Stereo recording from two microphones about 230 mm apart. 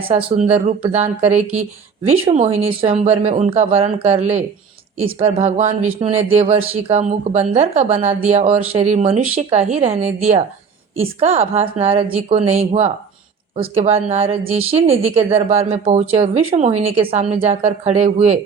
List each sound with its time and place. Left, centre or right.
0.1 s speech: right